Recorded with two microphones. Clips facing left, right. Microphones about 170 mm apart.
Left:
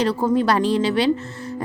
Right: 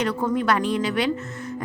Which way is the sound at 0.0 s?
30° left (ahead or behind).